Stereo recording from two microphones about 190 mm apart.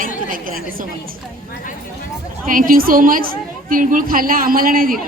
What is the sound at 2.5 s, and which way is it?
A woman's voice, 45° right (ahead or behind).